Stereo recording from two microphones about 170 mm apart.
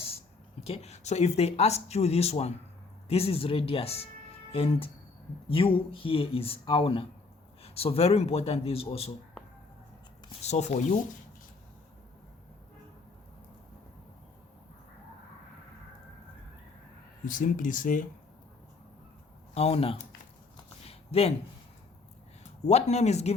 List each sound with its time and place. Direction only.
0.6 s speech: 35° left (ahead or behind)
10.4 s speech: 40° left (ahead or behind)
17.2 s speech: 55° left (ahead or behind)
19.5 s speech: 35° left (ahead or behind)
20.8 s a sound: 35° left (ahead or behind)
22.6 s speech: 40° left (ahead or behind)